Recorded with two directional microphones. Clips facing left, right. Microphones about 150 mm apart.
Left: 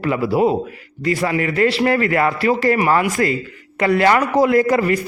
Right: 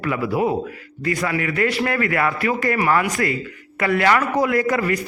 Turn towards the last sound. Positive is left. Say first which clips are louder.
# left 5 dB
turn(degrees=30)  # may be behind; listen again after turning